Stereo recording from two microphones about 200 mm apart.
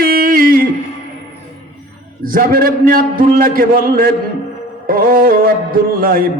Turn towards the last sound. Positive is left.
turn(degrees=-45)  # may be behind; listen again after turning